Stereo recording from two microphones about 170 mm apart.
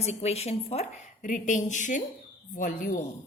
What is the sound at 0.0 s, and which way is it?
A woman's voice, 40° left (ahead or behind).